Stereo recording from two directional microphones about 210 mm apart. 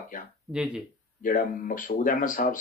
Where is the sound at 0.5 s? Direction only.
5° right (ahead or behind).